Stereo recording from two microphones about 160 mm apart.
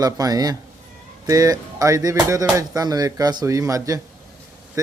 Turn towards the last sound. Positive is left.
turn(degrees=-20)  # may be behind; listen again after turning